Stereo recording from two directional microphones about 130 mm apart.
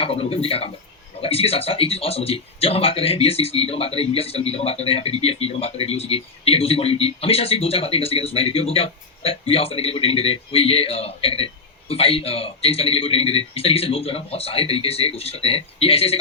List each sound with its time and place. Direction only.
0.0 s a man's voice: 45° left (ahead or behind)